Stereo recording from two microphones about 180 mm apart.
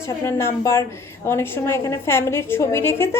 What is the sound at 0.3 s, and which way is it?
A woman's voice, 15° left (ahead or behind).